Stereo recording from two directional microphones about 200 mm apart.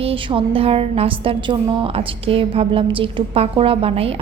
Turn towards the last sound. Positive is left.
turn(degrees=-30)  # may be behind; listen again after turning